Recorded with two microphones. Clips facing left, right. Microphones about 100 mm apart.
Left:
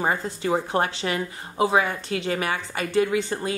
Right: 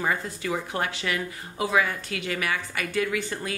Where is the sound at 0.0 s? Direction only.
30° left (ahead or behind).